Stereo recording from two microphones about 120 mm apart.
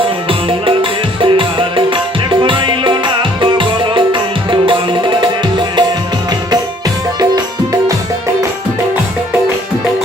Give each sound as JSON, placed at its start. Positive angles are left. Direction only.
{"t": 0.3, "sound": "music", "side_deg": -45}